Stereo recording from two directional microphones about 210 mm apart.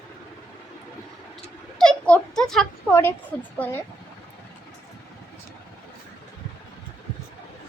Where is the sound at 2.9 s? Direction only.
10° left (ahead or behind).